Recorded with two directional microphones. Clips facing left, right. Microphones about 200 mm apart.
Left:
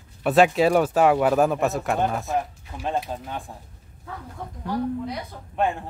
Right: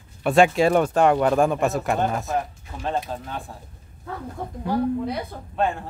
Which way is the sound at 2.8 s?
10° left (ahead or behind).